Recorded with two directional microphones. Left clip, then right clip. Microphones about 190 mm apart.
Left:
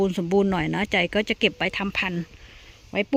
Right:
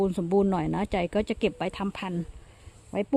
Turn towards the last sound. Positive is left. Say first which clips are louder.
# left 4 dB
turn(degrees=10)  # may be behind; listen again after turning